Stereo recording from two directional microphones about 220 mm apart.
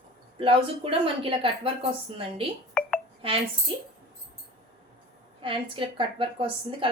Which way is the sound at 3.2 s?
25° right (ahead or behind).